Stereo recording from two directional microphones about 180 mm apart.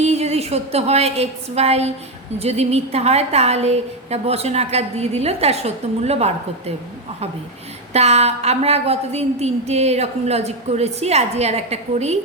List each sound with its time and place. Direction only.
0.0 s a woman's voice: 35° right (ahead or behind)
7.9 s a woman's voice: 35° right (ahead or behind)